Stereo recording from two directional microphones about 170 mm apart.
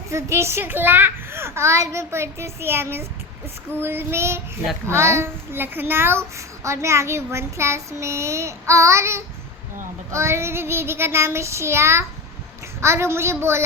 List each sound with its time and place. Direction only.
0.1 s a child's voice: 15° right (ahead or behind)